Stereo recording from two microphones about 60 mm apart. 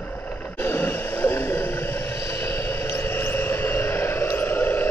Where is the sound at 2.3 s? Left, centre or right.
Left.